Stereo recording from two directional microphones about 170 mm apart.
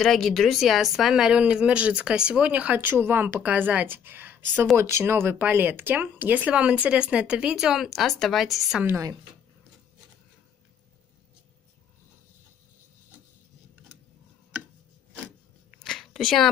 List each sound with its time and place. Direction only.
0.0 s speech: centre (ahead or behind)
8.8 s speech: 15° right (ahead or behind)
15.8 s a sound: centre (ahead or behind)